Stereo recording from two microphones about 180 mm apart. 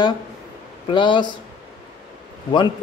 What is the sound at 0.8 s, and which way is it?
Speech, 25° left (ahead or behind).